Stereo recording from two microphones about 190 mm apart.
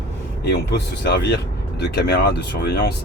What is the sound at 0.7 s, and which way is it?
Speech, 60° left (ahead or behind).